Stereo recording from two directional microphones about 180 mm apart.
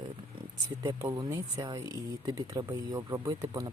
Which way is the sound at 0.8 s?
20° right (ahead or behind).